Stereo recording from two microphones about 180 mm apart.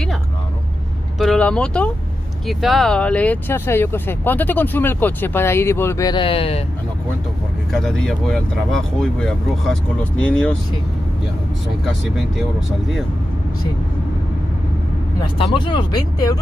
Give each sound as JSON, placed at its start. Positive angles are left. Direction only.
{"t": 1.2, "sound": "vehicle", "side_deg": 5}
{"t": 2.4, "sound": "speech", "side_deg": 0}
{"t": 7.7, "sound": "speech", "side_deg": 5}
{"t": 12.4, "sound": "speech", "side_deg": 0}
{"t": 15.3, "sound": "speech", "side_deg": 30}